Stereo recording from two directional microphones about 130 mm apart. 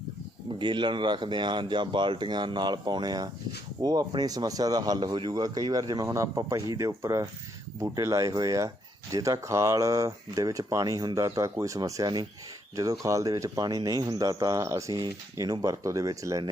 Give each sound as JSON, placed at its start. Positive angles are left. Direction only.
{"t": 0.6, "sound": "speech", "side_deg": -35}